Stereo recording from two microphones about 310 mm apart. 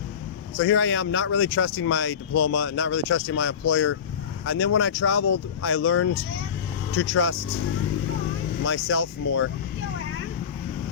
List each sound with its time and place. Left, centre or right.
0.5 s speech: left
8.6 s speech: left